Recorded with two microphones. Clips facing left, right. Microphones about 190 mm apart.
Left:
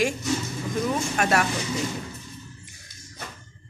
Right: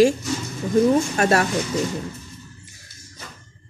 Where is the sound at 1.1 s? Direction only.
35° right (ahead or behind).